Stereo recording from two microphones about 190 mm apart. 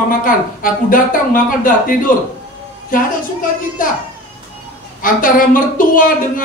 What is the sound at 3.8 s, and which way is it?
Speech, 45° left (ahead or behind).